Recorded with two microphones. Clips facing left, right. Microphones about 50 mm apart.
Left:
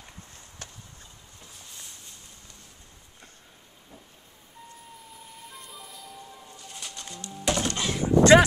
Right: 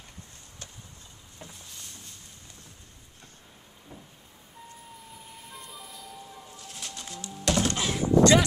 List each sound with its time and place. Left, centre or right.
5.5 s bird: centre
8.2 s speech: left